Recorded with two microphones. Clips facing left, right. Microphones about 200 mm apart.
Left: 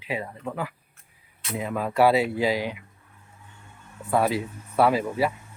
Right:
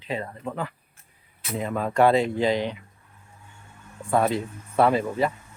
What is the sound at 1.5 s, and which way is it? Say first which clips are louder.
Speech: right 1 dB; 5° left (ahead or behind).